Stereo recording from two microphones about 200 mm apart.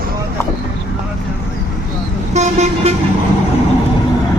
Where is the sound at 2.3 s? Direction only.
35° right (ahead or behind).